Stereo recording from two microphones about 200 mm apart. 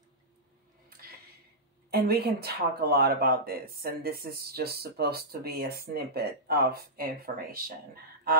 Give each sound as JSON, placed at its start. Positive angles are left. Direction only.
{"t": 1.9, "sound": "speech", "side_deg": -50}